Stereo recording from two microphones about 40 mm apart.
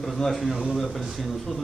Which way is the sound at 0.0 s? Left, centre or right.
Centre.